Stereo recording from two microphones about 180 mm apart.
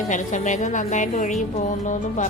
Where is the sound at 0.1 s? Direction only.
45° left (ahead or behind).